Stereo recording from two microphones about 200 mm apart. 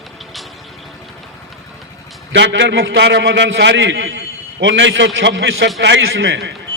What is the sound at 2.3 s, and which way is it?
A man's voice, 60° right (ahead or behind).